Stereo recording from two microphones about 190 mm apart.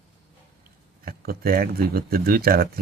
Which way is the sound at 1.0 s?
50° right (ahead or behind).